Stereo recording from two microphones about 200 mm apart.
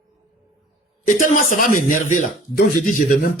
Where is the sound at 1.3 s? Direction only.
40° left (ahead or behind).